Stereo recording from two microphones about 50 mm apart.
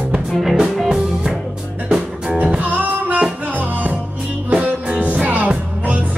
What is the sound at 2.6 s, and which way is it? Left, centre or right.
Music, right.